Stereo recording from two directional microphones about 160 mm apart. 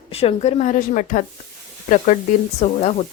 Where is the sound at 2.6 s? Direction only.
45° left (ahead or behind).